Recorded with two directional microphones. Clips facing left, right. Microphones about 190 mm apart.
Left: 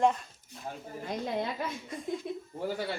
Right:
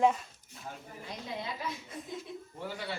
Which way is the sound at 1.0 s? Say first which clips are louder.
Left 8 dB; 55° left (ahead or behind).